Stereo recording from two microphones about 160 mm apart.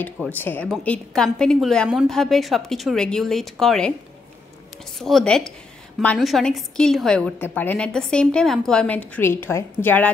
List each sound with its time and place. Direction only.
0.3 s a woman's voice: 10° left (ahead or behind)
4.9 s a woman's voice: centre (ahead or behind)